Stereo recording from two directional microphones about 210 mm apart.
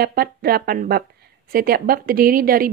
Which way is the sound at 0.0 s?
45° right (ahead or behind).